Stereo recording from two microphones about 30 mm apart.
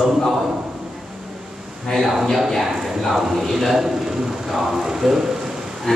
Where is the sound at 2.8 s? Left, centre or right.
Centre.